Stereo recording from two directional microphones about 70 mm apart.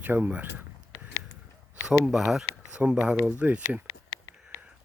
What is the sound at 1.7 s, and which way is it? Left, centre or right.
Speech, centre.